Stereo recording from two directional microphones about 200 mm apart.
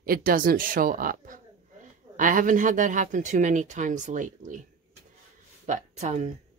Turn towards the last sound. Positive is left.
turn(degrees=-35)  # may be behind; listen again after turning